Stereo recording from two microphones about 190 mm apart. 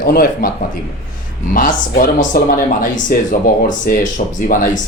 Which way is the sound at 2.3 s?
50° left (ahead or behind).